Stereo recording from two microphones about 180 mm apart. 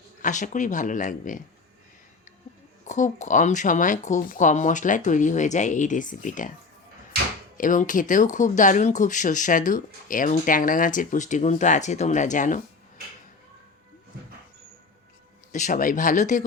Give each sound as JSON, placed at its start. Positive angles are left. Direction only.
{"t": 0.2, "sound": "speech", "side_deg": 45}
{"t": 2.8, "sound": "speech", "side_deg": 40}
{"t": 7.5, "sound": "speech", "side_deg": 45}
{"t": 15.5, "sound": "speech", "side_deg": 45}